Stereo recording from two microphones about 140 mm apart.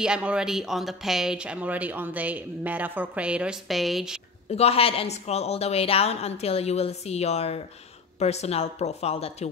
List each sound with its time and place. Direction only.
0.0 s speech: 5° right (ahead or behind)
4.5 s a woman's voice: 45° left (ahead or behind)